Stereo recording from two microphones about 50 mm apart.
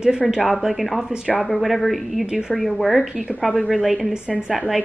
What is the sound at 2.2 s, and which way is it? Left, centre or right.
Speech, centre.